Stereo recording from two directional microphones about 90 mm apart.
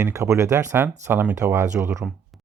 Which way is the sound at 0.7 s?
25° right (ahead or behind).